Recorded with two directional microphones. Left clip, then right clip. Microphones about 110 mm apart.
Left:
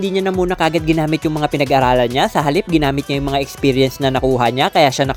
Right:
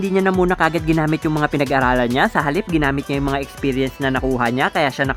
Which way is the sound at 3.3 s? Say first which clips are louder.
Left 5 dB; 30° left (ahead or behind).